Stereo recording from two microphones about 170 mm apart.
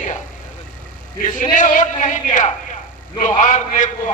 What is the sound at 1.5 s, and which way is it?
A man's voice, 50° left (ahead or behind).